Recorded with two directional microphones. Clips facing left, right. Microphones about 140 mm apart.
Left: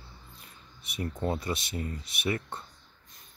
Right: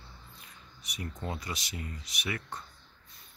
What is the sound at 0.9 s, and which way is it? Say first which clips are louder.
Speech: left 7 dB; 30° left (ahead or behind).